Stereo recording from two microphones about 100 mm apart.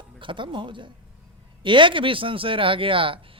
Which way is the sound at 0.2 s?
55° right (ahead or behind).